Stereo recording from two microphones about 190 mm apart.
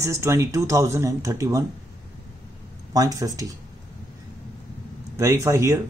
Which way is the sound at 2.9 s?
20° right (ahead or behind).